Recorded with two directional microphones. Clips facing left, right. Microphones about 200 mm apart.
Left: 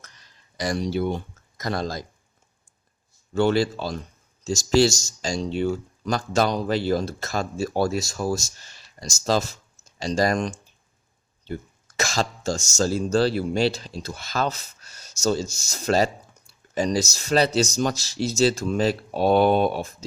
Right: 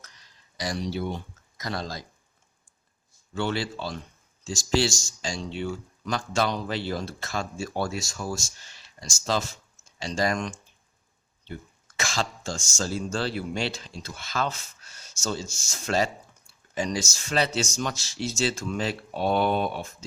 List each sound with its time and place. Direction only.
0.5 s speech: 50° left (ahead or behind)
3.3 s speech: 40° left (ahead or behind)
11.9 s speech: 40° left (ahead or behind)